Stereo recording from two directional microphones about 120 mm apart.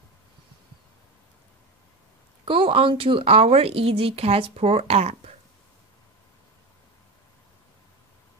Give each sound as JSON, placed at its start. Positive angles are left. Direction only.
{"t": 2.4, "sound": "speech", "side_deg": -50}